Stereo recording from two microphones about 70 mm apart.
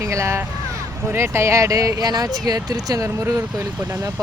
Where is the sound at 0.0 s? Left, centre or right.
Right.